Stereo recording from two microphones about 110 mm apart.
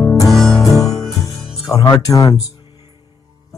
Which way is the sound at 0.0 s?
30° left (ahead or behind).